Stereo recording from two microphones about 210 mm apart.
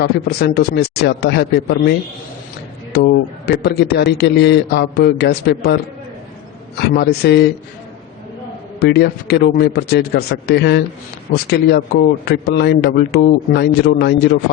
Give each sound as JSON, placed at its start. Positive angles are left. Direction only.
{"t": 0.0, "sound": "a man's voice", "side_deg": 50}
{"t": 8.8, "sound": "a man's voice", "side_deg": 50}